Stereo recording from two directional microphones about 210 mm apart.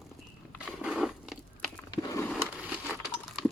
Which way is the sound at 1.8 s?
20° left (ahead or behind).